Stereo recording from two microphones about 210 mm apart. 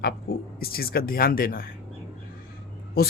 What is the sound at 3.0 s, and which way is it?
Speech, 45° left (ahead or behind).